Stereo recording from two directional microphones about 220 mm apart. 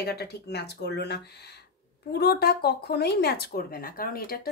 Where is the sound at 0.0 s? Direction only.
45° left (ahead or behind).